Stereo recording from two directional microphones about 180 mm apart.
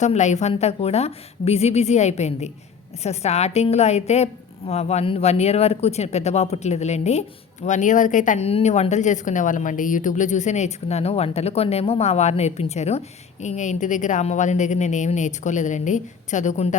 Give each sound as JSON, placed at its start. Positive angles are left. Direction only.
{"t": 0.0, "sound": "a woman's voice", "side_deg": 40}